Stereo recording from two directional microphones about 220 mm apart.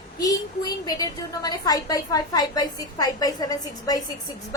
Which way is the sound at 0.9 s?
20° left (ahead or behind).